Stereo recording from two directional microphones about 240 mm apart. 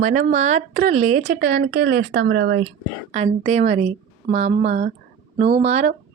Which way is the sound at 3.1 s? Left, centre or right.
Right.